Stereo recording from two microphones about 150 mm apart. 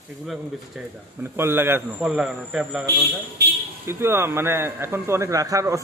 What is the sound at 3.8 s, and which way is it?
Speech, 15° right (ahead or behind).